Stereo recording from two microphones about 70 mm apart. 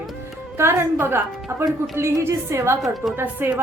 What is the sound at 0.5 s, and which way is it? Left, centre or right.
A woman's voice, right.